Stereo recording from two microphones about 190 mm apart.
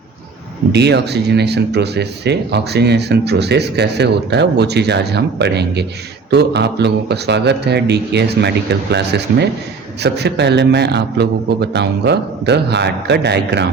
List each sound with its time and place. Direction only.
0.7 s speech: 60° right (ahead or behind)